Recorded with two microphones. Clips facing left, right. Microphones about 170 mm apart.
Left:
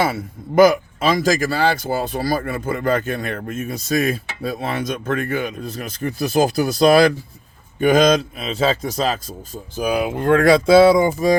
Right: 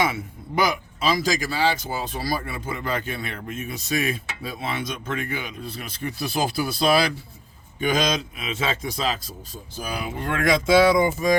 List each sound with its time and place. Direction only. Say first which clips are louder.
0.0 s speech: left 4 dB; 40° left (ahead or behind)
8.4 s speech: left 7 dB; 35° left (ahead or behind)
9.9 s speech: left 11 dB; 55° left (ahead or behind); by 11.3 s 30° left (ahead or behind)